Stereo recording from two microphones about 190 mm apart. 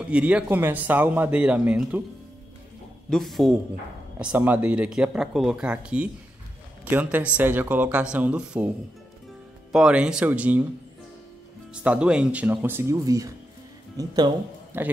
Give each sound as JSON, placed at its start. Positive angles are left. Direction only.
{"t": 0.0, "sound": "speech", "side_deg": -5}
{"t": 3.1, "sound": "speech", "side_deg": 0}
{"t": 9.7, "sound": "speech", "side_deg": -5}
{"t": 11.7, "sound": "speech", "side_deg": -5}
{"t": 14.7, "sound": "speech", "side_deg": -10}